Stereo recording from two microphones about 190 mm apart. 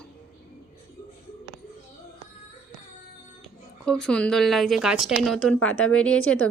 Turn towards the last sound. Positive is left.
turn(degrees=5)  # may be behind; listen again after turning